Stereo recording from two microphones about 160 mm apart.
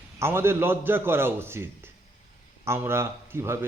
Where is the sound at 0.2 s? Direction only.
15° right (ahead or behind).